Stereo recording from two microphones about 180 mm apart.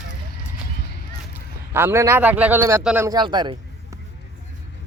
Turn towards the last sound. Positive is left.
turn(degrees=-25)  # may be behind; listen again after turning